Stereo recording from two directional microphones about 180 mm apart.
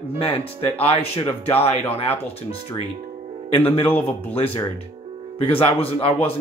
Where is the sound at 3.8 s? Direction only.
10° left (ahead or behind).